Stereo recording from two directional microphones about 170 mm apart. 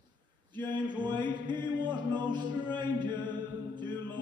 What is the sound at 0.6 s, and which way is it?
Mantra, 25° right (ahead or behind).